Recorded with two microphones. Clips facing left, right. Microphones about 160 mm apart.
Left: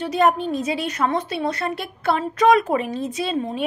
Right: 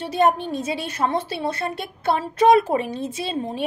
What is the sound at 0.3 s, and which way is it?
A woman's voice, 30° right (ahead or behind).